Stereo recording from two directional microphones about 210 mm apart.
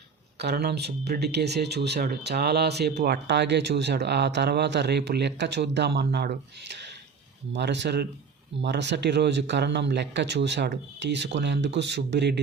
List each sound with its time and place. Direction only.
0.3 s speech: 50° right (ahead or behind)